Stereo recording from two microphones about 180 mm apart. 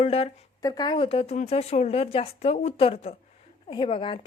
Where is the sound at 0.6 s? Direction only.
25° left (ahead or behind).